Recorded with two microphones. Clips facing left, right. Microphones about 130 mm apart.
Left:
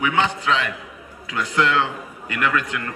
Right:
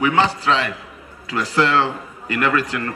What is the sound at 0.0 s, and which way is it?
A man's voice, 35° right (ahead or behind).